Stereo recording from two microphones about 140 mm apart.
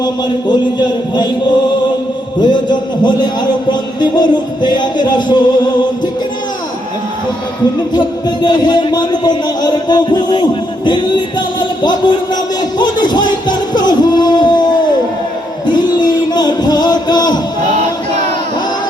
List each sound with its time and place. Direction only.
0.0 s speech: 30° left (ahead or behind)
7.9 s speech: 30° left (ahead or behind)
12.8 s music: 30° left (ahead or behind)